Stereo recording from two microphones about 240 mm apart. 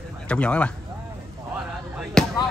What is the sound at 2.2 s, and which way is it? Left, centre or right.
Basketball bounce, centre.